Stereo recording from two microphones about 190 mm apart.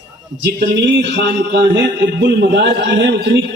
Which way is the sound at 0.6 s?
65° right (ahead or behind).